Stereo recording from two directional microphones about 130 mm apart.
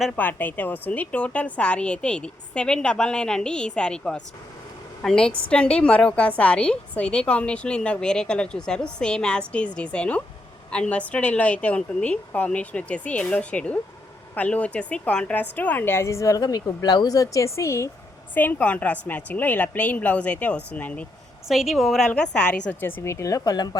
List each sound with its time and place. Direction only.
0.2 s a woman's voice: 15° left (ahead or behind)
21.4 s a woman's voice: centre (ahead or behind); by 23.7 s 30° left (ahead or behind)